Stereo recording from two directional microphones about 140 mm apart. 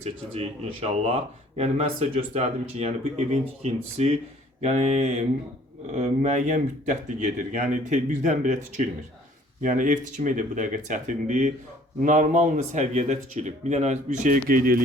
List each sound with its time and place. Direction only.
0.0 s speech: 45° right (ahead or behind); by 14.8 s 90° right